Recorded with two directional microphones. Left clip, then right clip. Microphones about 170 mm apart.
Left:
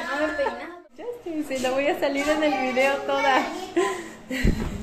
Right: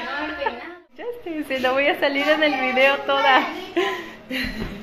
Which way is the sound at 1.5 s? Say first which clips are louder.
Right 4 dB; centre (ahead or behind).